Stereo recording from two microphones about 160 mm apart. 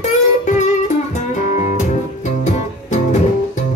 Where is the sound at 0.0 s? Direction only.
50° left (ahead or behind).